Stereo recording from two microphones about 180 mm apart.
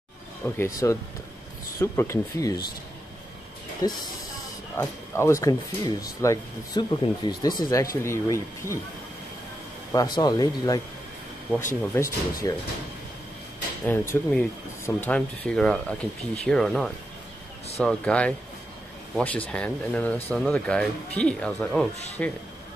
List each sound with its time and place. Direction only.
0.6 s speech: 20° left (ahead or behind)
3.8 s speech: 20° left (ahead or behind)
9.9 s speech: 25° left (ahead or behind)
13.8 s speech: 10° left (ahead or behind)